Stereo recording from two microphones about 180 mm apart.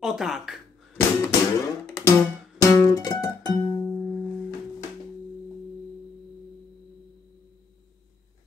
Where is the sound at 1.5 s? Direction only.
15° left (ahead or behind).